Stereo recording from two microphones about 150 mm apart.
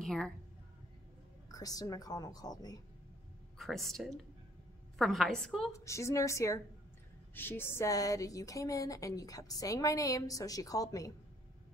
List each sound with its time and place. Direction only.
0.0 s a woman's voice: 5° left (ahead or behind)
1.5 s speech: 25° left (ahead or behind)
3.5 s a woman's voice: centre (ahead or behind)
5.7 s speech: 20° left (ahead or behind)